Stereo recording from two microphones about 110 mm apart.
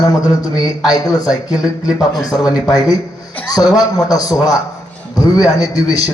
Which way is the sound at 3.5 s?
35° left (ahead or behind).